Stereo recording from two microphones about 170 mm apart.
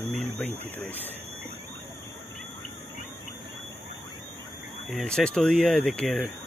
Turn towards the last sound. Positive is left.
turn(degrees=5)  # may be behind; listen again after turning